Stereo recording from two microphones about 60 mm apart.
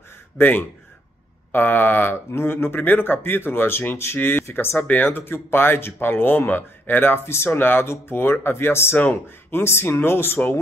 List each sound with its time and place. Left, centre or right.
0.4 s speech: left
4.7 s speech: left